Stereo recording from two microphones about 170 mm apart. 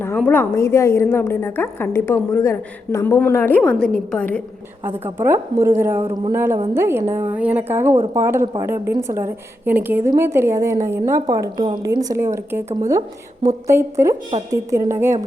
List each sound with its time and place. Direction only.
0.2 s a woman's voice: 10° left (ahead or behind)
4.9 s a woman's voice: 15° right (ahead or behind)